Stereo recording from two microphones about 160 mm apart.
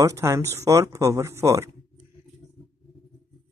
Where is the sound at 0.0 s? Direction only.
20° right (ahead or behind).